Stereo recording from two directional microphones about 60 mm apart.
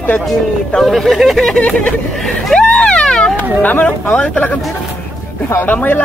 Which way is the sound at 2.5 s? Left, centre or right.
Centre.